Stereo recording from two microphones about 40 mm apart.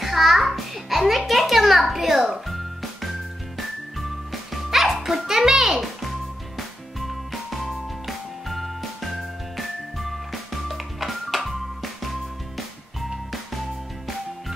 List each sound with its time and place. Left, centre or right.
0.0 s music: centre
13.1 s music: centre